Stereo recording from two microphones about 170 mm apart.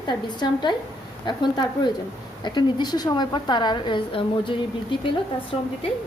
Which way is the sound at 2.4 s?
25° left (ahead or behind).